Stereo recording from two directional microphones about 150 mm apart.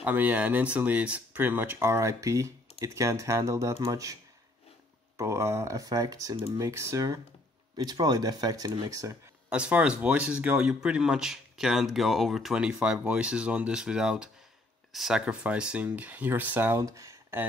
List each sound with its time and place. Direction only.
0.0 s speech: 10° right (ahead or behind)
9.5 s speech: 10° right (ahead or behind)